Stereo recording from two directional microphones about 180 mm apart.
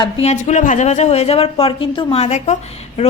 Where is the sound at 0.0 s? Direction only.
35° left (ahead or behind).